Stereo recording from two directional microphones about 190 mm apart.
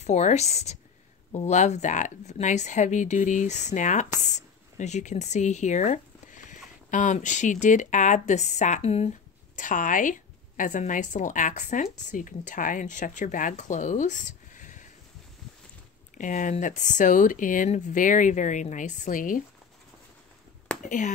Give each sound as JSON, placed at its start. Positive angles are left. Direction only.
{"t": 0.0, "sound": "a woman's voice", "side_deg": 35}
{"t": 16.2, "sound": "a woman's voice", "side_deg": 40}
{"t": 20.8, "sound": "a woman's voice", "side_deg": 40}